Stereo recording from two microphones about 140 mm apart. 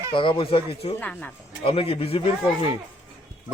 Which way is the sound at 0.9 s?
10° left (ahead or behind).